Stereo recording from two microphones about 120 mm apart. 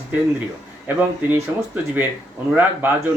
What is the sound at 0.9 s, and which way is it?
Speech, 15° right (ahead or behind).